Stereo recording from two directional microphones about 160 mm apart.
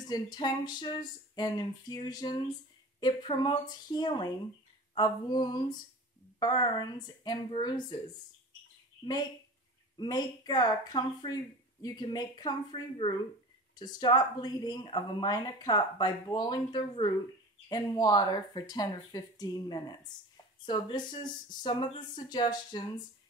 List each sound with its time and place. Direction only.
0.0 s speech: 25° left (ahead or behind)
9.9 s speech: 25° left (ahead or behind)